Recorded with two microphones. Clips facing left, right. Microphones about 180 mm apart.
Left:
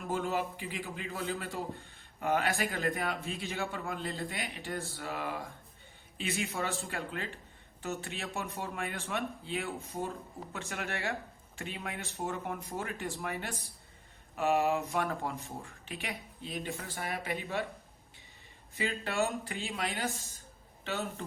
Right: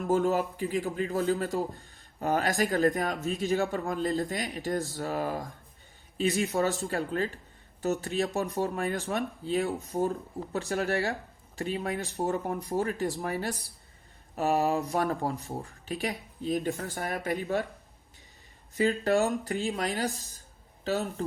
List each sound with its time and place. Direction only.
0.1 s a man's voice: 40° right (ahead or behind)
18.7 s a man's voice: 40° right (ahead or behind)